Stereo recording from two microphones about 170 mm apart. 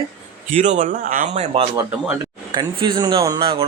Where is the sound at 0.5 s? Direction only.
45° right (ahead or behind).